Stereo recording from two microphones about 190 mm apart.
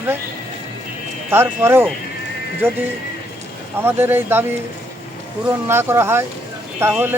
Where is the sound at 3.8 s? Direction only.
10° right (ahead or behind).